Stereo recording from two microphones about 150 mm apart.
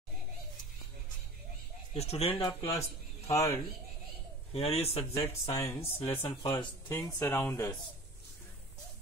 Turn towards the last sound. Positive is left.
turn(degrees=20)  # may be behind; listen again after turning